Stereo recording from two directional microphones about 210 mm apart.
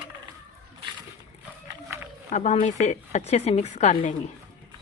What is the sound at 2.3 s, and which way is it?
Speech, 35° left (ahead or behind).